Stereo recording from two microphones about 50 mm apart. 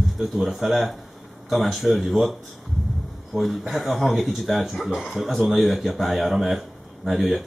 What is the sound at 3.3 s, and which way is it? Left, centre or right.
Speech, centre.